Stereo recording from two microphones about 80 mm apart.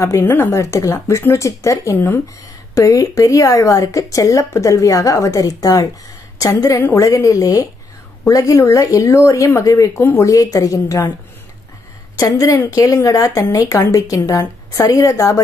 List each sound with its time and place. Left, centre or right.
0.2 s speech: left
12.2 s speech: left